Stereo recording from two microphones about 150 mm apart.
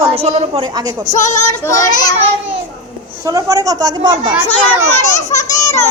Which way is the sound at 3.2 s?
20° right (ahead or behind).